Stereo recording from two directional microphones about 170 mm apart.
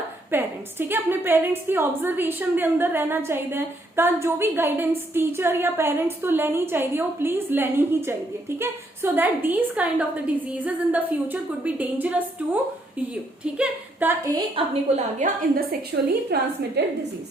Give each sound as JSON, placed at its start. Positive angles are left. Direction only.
{"t": 0.3, "sound": "a woman's voice", "side_deg": -10}
{"t": 13.4, "sound": "a woman's voice", "side_deg": -5}
{"t": 14.5, "sound": "a woman's voice", "side_deg": -40}
{"t": 15.9, "sound": "a woman's voice", "side_deg": -90}
{"t": 16.3, "sound": "a woman's voice", "side_deg": -70}